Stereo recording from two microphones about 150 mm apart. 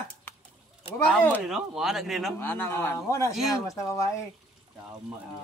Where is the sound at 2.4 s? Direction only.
15° left (ahead or behind).